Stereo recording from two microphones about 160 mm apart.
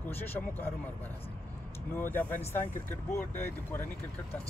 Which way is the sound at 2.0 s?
10° left (ahead or behind).